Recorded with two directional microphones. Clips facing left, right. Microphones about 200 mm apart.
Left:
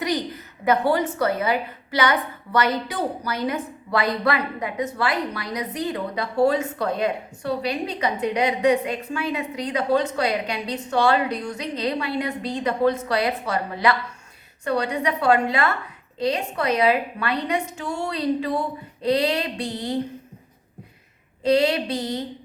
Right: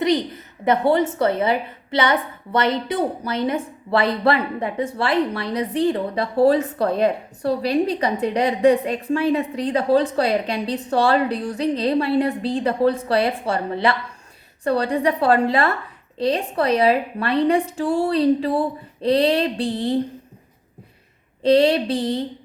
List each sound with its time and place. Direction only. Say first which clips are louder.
0.0 s a woman's voice: right 5 dB; 25° right (ahead or behind)
21.4 s a woman's voice: right 4 dB; 30° right (ahead or behind)